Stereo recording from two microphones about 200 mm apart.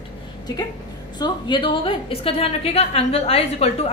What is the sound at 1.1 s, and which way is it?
A woman's voice, 20° left (ahead or behind).